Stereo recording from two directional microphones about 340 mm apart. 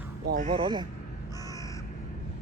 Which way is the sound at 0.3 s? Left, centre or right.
Right.